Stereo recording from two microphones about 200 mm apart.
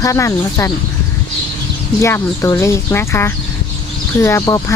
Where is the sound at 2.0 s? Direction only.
15° left (ahead or behind).